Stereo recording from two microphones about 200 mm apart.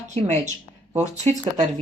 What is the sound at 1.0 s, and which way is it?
Speech, 35° right (ahead or behind).